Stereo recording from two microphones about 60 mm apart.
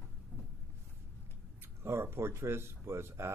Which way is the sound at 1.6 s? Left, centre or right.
Right.